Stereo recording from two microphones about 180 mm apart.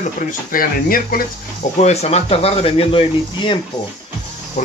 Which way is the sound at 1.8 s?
35° left (ahead or behind).